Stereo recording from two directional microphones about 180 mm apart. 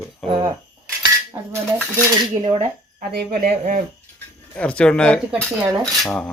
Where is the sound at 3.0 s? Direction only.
55° right (ahead or behind).